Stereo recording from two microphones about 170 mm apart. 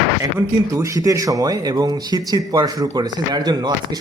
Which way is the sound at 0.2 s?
20° right (ahead or behind).